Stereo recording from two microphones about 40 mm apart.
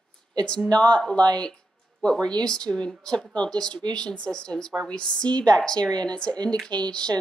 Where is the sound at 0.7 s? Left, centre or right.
Left.